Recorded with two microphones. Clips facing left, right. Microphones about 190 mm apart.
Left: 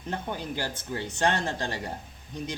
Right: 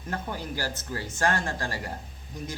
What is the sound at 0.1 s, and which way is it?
Speech, 20° left (ahead or behind).